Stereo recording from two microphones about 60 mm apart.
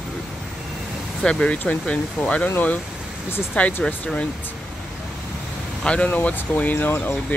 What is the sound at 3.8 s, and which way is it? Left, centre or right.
Speech, centre.